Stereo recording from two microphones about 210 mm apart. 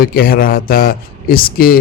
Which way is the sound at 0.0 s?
45° left (ahead or behind).